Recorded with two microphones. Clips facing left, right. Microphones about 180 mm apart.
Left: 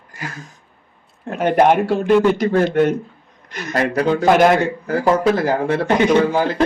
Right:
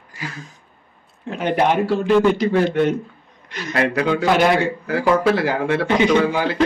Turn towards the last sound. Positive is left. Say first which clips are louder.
# left 2 dB
turn(degrees=45)  # may be behind; listen again after turning